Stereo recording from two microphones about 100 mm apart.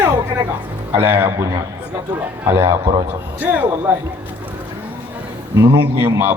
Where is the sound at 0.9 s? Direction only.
20° right (ahead or behind).